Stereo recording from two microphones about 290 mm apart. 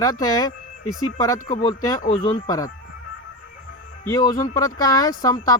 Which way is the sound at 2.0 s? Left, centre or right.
Left.